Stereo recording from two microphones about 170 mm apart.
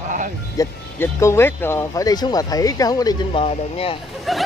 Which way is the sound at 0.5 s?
15° left (ahead or behind).